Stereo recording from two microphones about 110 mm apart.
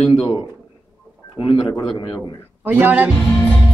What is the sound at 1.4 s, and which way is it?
Speech, 50° left (ahead or behind).